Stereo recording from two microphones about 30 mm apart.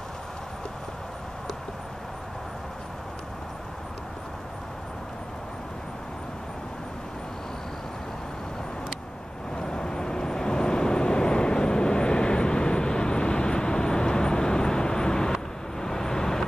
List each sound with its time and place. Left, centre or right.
9.6 s vehicle: left